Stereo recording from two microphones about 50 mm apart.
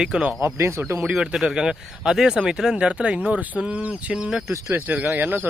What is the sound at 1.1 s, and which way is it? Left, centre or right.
Speech, centre.